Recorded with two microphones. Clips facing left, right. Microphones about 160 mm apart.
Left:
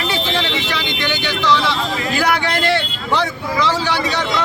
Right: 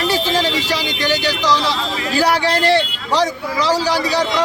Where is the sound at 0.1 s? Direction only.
40° right (ahead or behind).